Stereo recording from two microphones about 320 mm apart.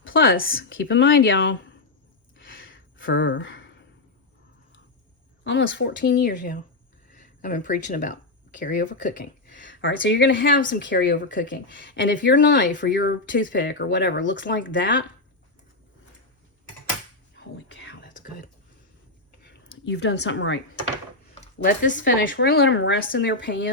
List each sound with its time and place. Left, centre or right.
0.0 s speech: left
2.4 s a sound: left
5.4 s speech: left
17.3 s whispering: left
19.5 s speech: left
21.6 s speech: left